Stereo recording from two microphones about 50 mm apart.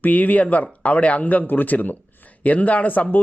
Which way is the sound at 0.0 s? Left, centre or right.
Left.